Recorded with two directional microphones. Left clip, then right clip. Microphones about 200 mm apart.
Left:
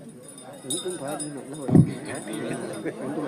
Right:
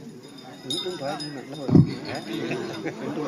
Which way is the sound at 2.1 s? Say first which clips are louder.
Right 2 dB; 30° left (ahead or behind).